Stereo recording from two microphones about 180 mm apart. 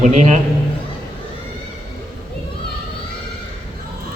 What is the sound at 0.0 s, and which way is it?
Speech, 40° right (ahead or behind).